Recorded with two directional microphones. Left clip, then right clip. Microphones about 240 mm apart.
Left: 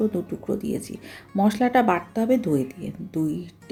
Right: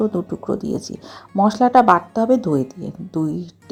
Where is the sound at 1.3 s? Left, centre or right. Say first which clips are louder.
Right 6 dB; centre.